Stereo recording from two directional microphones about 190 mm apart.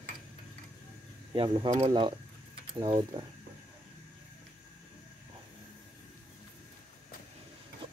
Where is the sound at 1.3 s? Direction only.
25° right (ahead or behind).